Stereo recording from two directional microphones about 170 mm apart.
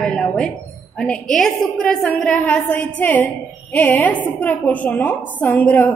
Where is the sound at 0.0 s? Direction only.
5° left (ahead or behind).